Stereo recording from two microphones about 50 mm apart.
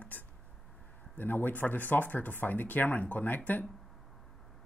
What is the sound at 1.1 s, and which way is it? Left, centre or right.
Speech, left.